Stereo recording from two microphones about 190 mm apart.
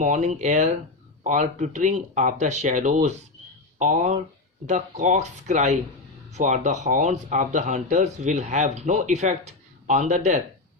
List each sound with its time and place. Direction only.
0.0 s speech: 40° right (ahead or behind)